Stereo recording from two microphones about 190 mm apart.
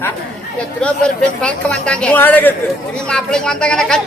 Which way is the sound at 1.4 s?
5° left (ahead or behind).